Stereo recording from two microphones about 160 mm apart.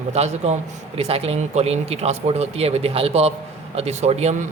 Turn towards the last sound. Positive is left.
turn(degrees=-45)  # may be behind; listen again after turning